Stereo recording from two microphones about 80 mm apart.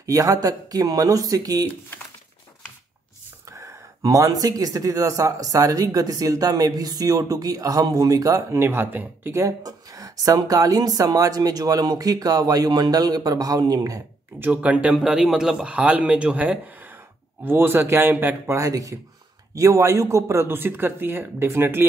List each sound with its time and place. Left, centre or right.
0.0 s speech: right
3.4 s speech: right
9.4 s speech: right
14.4 s a man's voice: centre
15.0 s a man's voice: centre; by 18.3 s right
18.5 s speech: right